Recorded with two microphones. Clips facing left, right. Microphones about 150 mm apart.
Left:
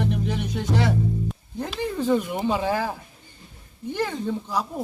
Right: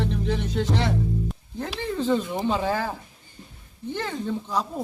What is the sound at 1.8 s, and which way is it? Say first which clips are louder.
Speech: left 1 dB; 10° left (ahead or behind).